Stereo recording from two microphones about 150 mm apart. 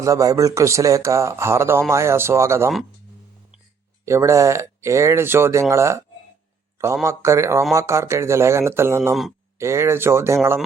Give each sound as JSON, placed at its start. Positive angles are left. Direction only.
{"t": 0.0, "sound": "a man's voice", "side_deg": -20}
{"t": 4.0, "sound": "a man's voice", "side_deg": -20}